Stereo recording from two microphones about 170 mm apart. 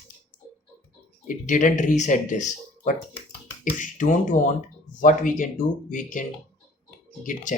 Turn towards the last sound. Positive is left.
turn(degrees=50)  # may be behind; listen again after turning